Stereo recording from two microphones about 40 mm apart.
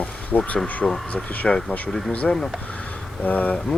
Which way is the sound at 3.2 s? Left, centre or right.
Left.